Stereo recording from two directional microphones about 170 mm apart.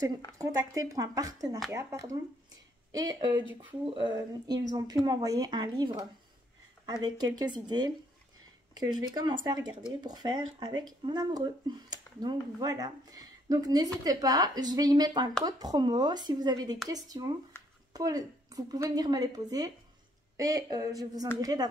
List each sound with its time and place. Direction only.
0.4 s speech: 20° right (ahead or behind)
9.1 s speech: 25° right (ahead or behind)